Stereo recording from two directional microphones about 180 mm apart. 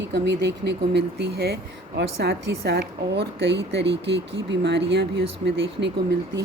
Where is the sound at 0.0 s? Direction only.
75° right (ahead or behind).